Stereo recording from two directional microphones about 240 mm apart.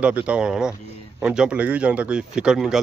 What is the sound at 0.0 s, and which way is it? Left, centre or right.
Speech, centre.